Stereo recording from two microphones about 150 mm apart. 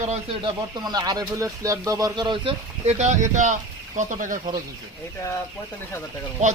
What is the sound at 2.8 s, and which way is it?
Speech, 50° right (ahead or behind).